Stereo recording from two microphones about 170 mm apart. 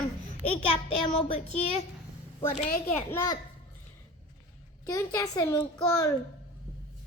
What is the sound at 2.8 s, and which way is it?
Speech, 10° left (ahead or behind).